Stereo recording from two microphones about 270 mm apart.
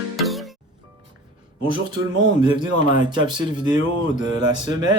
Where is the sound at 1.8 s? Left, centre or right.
Centre.